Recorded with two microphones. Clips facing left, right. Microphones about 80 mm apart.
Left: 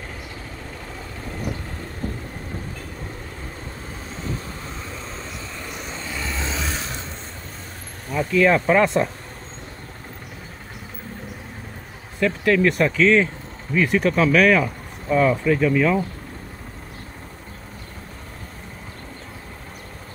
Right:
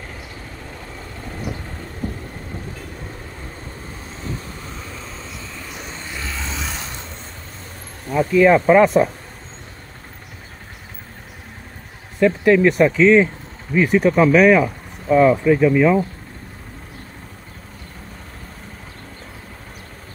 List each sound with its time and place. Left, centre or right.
1.3 s vehicle: centre
4.1 s vehicle: centre
6.6 s mechanisms: centre
8.1 s speech: centre
12.2 s speech: centre